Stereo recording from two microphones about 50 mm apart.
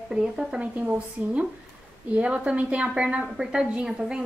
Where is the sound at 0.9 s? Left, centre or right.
Right.